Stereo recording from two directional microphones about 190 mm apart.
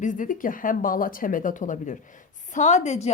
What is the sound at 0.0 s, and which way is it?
A woman's voice, 40° left (ahead or behind).